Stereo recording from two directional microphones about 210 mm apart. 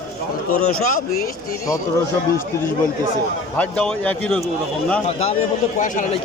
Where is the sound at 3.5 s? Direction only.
5° left (ahead or behind).